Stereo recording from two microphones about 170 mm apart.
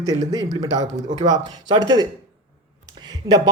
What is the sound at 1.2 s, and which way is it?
Speech, 20° right (ahead or behind).